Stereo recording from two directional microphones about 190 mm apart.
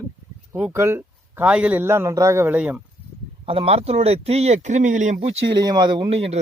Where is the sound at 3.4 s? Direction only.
30° right (ahead or behind).